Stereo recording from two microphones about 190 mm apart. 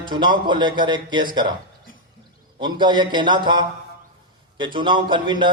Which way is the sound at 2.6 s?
25° right (ahead or behind).